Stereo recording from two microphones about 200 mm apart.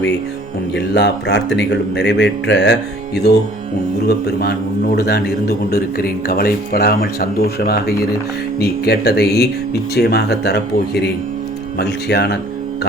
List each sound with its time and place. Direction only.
0.8 s speech: 60° left (ahead or behind)
4.3 s a man's voice: 50° left (ahead or behind)